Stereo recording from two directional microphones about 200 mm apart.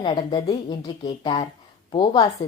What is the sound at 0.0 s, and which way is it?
A woman's voice, 25° left (ahead or behind).